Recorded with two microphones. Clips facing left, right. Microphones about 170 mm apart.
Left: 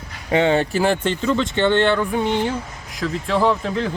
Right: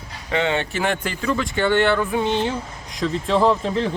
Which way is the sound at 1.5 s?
20° left (ahead or behind).